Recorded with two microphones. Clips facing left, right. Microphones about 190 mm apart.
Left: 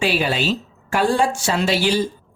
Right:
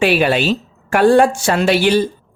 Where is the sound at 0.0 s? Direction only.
65° right (ahead or behind).